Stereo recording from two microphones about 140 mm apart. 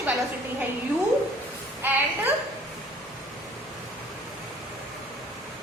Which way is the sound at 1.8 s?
15° right (ahead or behind).